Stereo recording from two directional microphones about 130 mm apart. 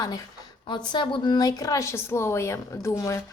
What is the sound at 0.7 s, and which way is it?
A woman's voice, 35° left (ahead or behind).